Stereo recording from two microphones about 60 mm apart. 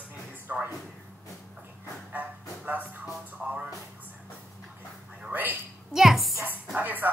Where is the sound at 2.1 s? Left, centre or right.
Right.